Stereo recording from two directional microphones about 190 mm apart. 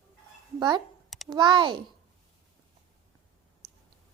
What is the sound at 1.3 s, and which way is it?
Speech, 25° right (ahead or behind).